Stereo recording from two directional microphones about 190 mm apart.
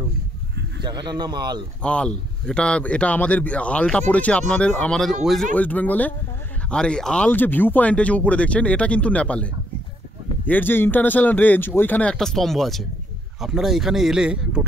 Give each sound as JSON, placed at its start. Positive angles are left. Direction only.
{"t": 0.8, "sound": "speech", "side_deg": -20}
{"t": 1.8, "sound": "speech", "side_deg": 5}